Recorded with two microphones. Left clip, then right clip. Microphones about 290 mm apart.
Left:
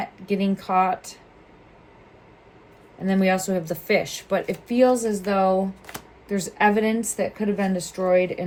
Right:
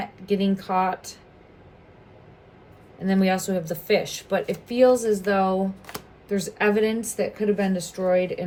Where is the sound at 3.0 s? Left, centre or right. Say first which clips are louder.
Left 1 dB; left.